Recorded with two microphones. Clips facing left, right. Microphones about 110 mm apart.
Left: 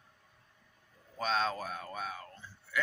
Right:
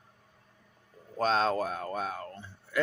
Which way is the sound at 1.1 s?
40° right (ahead or behind).